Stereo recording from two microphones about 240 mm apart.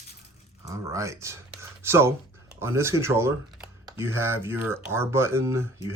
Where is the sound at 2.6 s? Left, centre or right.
Centre.